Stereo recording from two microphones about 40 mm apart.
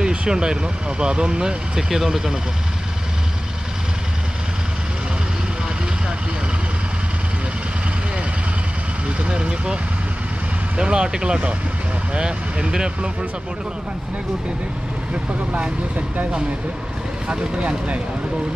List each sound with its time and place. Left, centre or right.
0.0 s speech: right
1.8 s speech: centre
9.0 s vehicle: right
10.8 s speech: right
17.3 s speech: right